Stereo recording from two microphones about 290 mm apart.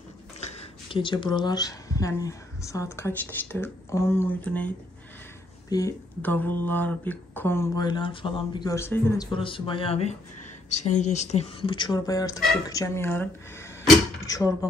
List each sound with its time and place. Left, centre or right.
0.9 s speech: centre
5.7 s speech: centre
10.7 s speech: left
11.1 s speech: left